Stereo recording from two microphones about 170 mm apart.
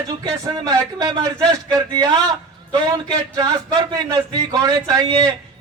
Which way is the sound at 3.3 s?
25° right (ahead or behind).